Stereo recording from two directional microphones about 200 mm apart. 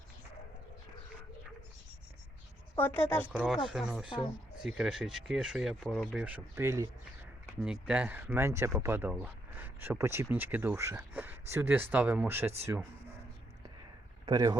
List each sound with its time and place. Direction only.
2.7 s speech: 10° left (ahead or behind)
3.2 s speech: 5° right (ahead or behind)
14.3 s speech: 25° right (ahead or behind)